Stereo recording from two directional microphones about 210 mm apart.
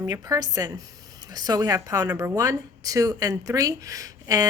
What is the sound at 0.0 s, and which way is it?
Speech, 15° right (ahead or behind).